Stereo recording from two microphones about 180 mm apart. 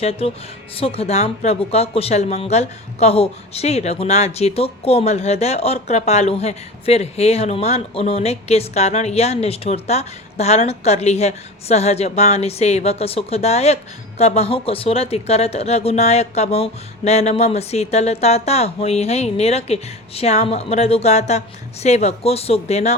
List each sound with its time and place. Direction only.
0.0 s speech: 35° left (ahead or behind)